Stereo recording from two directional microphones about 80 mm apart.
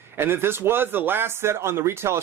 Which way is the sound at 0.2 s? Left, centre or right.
Right.